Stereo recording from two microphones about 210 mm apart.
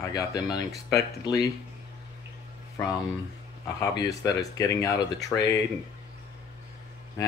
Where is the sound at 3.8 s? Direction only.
15° left (ahead or behind).